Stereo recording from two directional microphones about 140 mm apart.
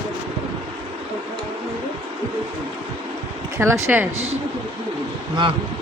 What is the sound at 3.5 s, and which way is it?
Speech, 20° right (ahead or behind).